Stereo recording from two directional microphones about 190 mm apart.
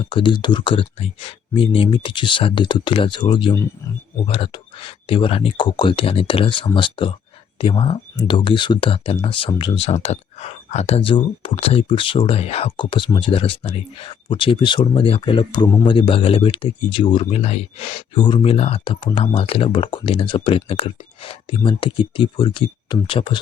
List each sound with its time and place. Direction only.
0.0 s speech: 25° left (ahead or behind)